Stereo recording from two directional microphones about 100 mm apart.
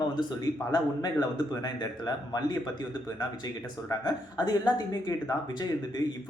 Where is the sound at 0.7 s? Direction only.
45° left (ahead or behind).